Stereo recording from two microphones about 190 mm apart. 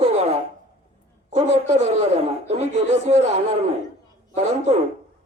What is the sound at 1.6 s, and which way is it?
Speech, 35° right (ahead or behind).